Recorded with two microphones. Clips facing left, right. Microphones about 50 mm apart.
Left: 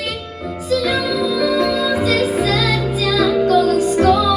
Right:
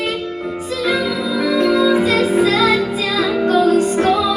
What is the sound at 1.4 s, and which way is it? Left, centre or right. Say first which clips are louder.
Music: right 5 dB; right.